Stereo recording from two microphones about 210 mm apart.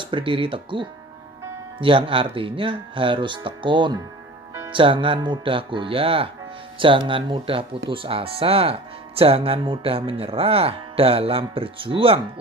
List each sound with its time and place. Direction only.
0.0 s speech: 25° right (ahead or behind)